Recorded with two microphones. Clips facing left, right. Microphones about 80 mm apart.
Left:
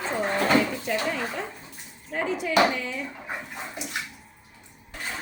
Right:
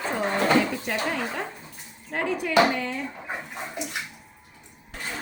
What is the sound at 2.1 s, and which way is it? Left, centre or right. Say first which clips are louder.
Speech: right 1 dB; right.